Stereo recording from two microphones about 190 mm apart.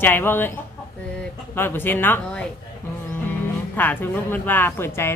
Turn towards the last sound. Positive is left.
turn(degrees=10)  # may be behind; listen again after turning